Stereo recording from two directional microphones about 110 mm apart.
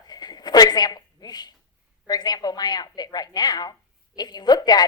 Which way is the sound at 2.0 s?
40° left (ahead or behind).